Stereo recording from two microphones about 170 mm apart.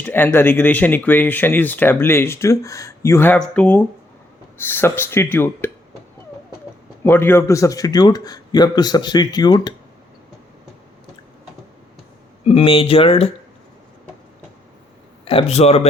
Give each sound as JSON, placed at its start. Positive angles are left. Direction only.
{"t": 0.0, "sound": "speech", "side_deg": 10}
{"t": 7.0, "sound": "speech", "side_deg": 15}
{"t": 12.5, "sound": "speech", "side_deg": 35}
{"t": 15.2, "sound": "speech", "side_deg": 35}